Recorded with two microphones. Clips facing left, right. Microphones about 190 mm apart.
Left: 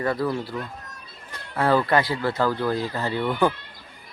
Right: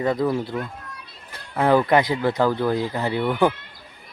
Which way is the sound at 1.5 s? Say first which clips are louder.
Right 3 dB; 15° right (ahead or behind).